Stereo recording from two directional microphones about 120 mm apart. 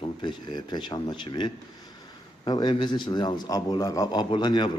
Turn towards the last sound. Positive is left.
turn(degrees=35)  # may be behind; listen again after turning